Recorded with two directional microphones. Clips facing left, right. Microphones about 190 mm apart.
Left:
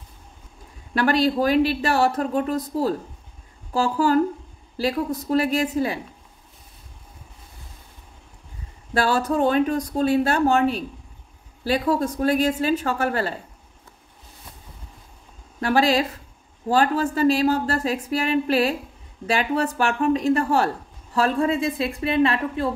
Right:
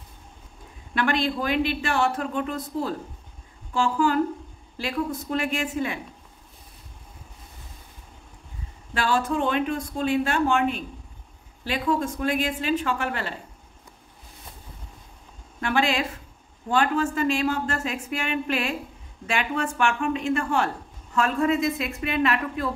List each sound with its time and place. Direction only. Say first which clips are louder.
0.9 s speech: left 5 dB; 40° left (ahead or behind)
8.9 s speech: left 3 dB; 40° left (ahead or behind)
15.6 s speech: left 5 dB; 35° left (ahead or behind)